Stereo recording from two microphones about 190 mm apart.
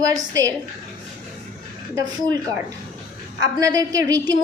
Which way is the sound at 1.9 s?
20° right (ahead or behind).